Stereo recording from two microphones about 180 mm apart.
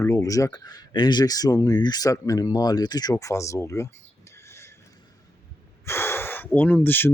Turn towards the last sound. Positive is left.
turn(degrees=10)  # may be behind; listen again after turning